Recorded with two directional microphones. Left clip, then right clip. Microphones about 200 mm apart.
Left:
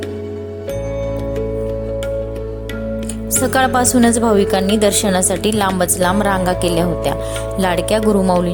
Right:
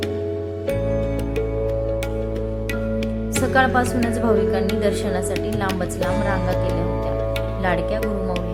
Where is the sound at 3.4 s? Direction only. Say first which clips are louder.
Left 4 dB; 50° left (ahead or behind).